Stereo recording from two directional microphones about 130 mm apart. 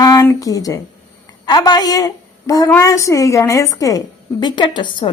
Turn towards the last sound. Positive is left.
turn(degrees=35)  # may be behind; listen again after turning